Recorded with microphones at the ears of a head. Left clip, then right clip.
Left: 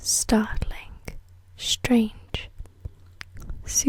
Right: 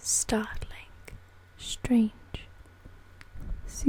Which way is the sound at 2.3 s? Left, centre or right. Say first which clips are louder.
Left 10 dB; left.